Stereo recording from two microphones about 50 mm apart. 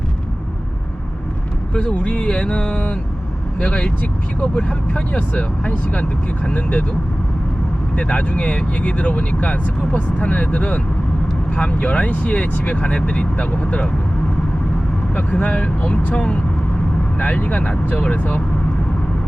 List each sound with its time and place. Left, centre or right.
1.7 s speech: left
7.9 s speech: left
15.1 s speech: left